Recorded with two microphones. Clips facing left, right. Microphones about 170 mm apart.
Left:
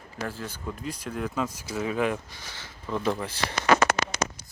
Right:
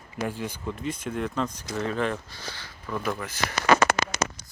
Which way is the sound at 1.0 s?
Centre (ahead or behind).